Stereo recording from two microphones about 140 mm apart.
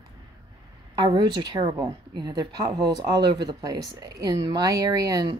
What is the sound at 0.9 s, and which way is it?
Speech, 35° right (ahead or behind).